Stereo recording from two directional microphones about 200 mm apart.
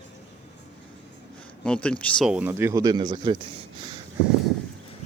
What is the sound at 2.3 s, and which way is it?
Speech, 10° right (ahead or behind).